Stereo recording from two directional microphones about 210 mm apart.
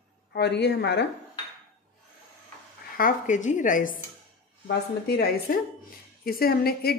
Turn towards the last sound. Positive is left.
turn(degrees=45)  # may be behind; listen again after turning